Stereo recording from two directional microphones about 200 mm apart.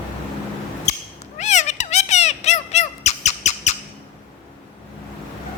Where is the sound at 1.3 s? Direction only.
35° left (ahead or behind).